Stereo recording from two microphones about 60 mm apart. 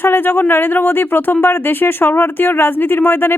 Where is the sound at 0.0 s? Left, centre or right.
Left.